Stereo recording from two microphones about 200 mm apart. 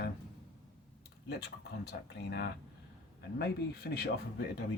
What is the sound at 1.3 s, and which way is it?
Speech, 55° left (ahead or behind).